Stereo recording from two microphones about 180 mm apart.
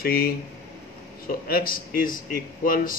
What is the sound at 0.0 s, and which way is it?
Speech, 55° left (ahead or behind).